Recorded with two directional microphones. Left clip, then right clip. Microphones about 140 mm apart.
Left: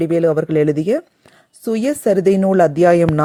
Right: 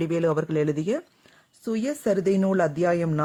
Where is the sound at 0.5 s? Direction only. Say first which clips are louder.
Left 9 dB; 35° left (ahead or behind).